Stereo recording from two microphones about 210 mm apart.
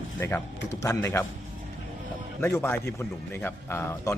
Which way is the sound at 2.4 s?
10° left (ahead or behind).